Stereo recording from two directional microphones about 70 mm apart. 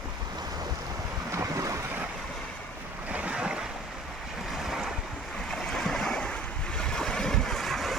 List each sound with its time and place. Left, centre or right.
1.3 s waves: right
3.1 s waves: centre
5.5 s waves: centre
6.7 s boat: centre